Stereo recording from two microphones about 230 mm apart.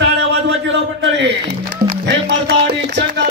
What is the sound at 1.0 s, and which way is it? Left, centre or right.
Speech, right.